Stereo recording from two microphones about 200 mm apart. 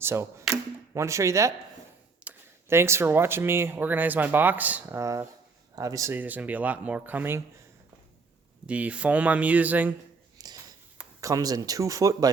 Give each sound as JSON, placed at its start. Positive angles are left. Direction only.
{"t": 0.0, "sound": "speech", "side_deg": -15}
{"t": 8.6, "sound": "speech", "side_deg": -5}
{"t": 10.3, "sound": "a sound", "side_deg": -20}
{"t": 10.9, "sound": "speech", "side_deg": -15}